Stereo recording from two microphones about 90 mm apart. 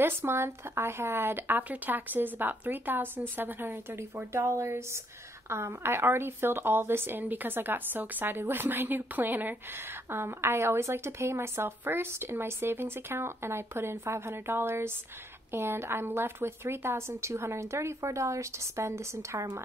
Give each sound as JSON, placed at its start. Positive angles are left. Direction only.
{"t": 0.0, "sound": "speech", "side_deg": -25}